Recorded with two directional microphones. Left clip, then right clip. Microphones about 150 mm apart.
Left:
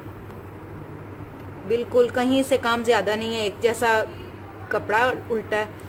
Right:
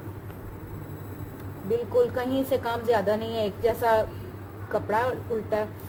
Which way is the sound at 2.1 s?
30° left (ahead or behind).